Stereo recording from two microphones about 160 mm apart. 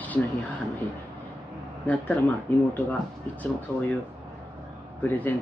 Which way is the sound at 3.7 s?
15° left (ahead or behind).